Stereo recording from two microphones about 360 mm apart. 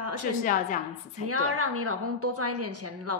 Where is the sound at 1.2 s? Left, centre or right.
Right.